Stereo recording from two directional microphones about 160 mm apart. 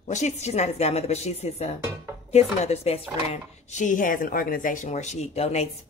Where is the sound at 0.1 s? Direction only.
45° left (ahead or behind).